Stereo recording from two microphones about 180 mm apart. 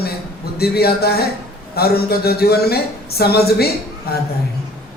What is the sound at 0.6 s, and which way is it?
A man's voice, 60° left (ahead or behind).